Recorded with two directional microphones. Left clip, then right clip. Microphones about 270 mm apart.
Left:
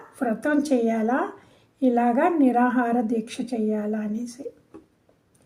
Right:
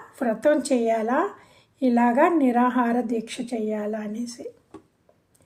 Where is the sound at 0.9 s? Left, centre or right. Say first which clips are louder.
Right 2 dB; right.